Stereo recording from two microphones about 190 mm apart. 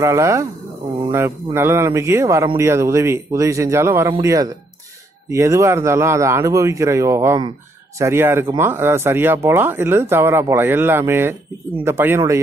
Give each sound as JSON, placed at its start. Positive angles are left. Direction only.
{"t": 0.0, "sound": "a man's voice", "side_deg": -15}